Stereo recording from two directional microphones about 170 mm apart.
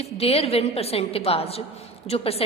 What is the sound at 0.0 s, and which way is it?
A woman's voice, 35° left (ahead or behind).